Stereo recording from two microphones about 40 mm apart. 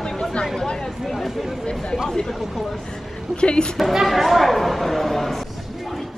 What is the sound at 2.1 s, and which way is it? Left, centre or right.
Speech, centre.